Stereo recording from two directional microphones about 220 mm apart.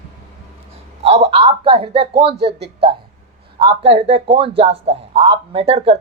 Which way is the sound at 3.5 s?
25° right (ahead or behind).